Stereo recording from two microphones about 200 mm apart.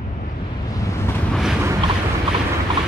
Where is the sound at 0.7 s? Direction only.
15° left (ahead or behind).